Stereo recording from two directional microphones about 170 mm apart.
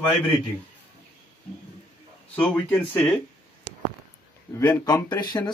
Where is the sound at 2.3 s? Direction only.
10° left (ahead or behind).